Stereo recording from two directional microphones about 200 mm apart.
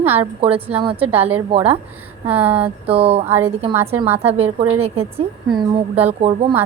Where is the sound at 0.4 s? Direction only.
30° right (ahead or behind).